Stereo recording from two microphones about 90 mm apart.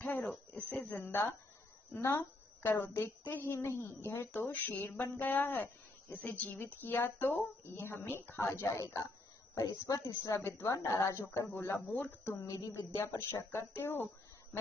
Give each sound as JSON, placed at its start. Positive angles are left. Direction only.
{"t": 0.0, "sound": "a sound", "side_deg": 10}
{"t": 0.8, "sound": "speech", "side_deg": 25}
{"t": 9.8, "sound": "a woman's voice", "side_deg": 40}
{"t": 12.3, "sound": "a woman's voice", "side_deg": 40}